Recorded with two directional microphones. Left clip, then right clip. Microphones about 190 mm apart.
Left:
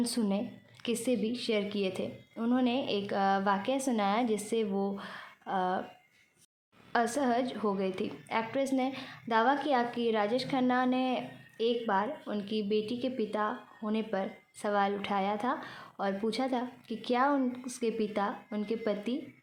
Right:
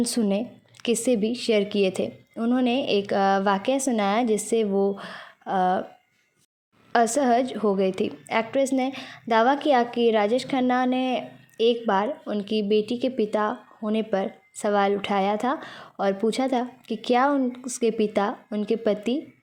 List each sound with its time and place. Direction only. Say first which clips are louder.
0.0 s speech: right 8 dB; 35° right (ahead or behind)
6.9 s speech: right 9 dB; 35° right (ahead or behind)